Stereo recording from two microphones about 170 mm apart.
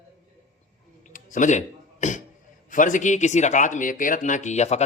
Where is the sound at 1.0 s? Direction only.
50° left (ahead or behind).